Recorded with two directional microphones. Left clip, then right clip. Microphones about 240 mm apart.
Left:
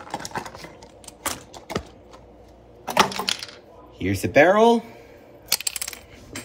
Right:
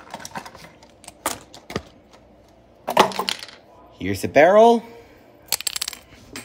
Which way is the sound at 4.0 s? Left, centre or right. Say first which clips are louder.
Right 1 dB; centre.